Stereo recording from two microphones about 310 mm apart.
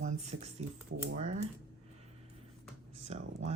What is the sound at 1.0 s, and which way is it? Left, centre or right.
Speech, right.